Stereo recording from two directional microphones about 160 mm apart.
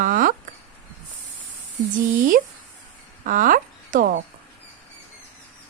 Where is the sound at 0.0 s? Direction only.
60° right (ahead or behind).